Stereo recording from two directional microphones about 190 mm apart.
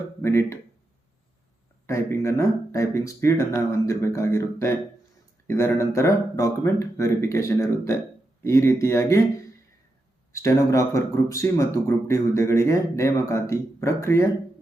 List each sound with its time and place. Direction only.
0.2 s speech: 15° left (ahead or behind)
1.9 s speech: 15° left (ahead or behind)
10.3 s speech: 15° left (ahead or behind)